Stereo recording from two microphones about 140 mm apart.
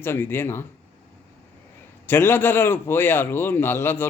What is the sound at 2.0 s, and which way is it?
A man's voice, 15° left (ahead or behind).